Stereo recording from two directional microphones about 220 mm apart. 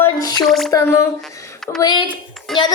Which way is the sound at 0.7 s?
15° left (ahead or behind).